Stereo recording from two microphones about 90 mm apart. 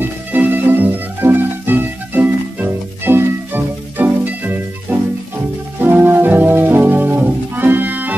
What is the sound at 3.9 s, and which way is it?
Music, 20° right (ahead or behind).